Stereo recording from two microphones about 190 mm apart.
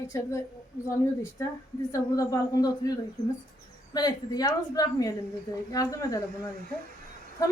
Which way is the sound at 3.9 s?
20° left (ahead or behind).